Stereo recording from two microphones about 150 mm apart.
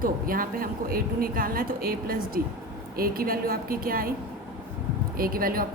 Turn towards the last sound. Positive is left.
turn(degrees=-75)  # may be behind; listen again after turning